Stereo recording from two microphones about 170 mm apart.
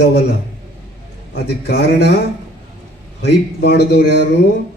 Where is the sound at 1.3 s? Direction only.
75° left (ahead or behind).